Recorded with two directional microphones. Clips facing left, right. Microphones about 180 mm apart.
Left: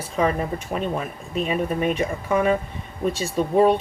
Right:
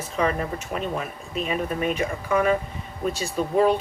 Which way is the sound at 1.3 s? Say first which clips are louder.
Left 3 dB; 40° left (ahead or behind).